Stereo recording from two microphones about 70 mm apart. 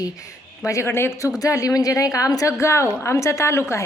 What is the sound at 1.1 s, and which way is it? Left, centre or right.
Speech, left.